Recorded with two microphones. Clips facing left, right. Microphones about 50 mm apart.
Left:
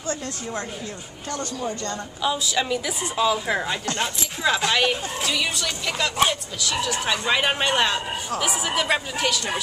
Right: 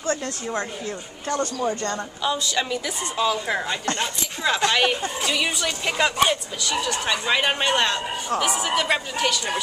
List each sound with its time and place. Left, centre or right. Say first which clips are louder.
1.3 s speech: right 4 dB; right
2.2 s a woman's voice: left 1 dB; centre
5.9 s speech: right 4 dB; right
6.1 s a woman's voice: right 1 dB; centre